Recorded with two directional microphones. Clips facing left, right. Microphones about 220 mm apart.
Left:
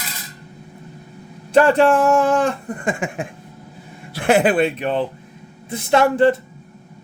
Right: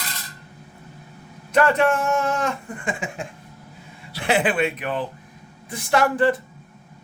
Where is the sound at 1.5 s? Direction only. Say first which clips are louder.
Left 5 dB; 30° left (ahead or behind).